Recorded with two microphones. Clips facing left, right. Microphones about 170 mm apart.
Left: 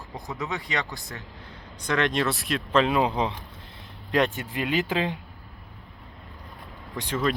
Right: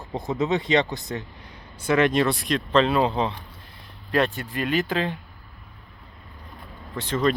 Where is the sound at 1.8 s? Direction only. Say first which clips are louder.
Right 5 dB; 5° right (ahead or behind); by 5.1 s 15° left (ahead or behind).